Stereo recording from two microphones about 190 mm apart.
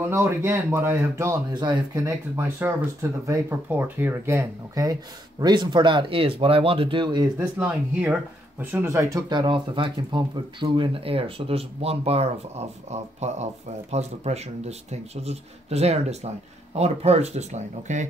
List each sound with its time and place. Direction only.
0.1 s speech: 15° right (ahead or behind)
7.5 s speech: 10° right (ahead or behind); by 18.0 s 40° right (ahead or behind)